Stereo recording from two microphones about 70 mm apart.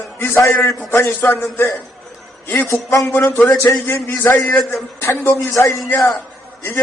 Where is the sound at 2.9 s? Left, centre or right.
Left.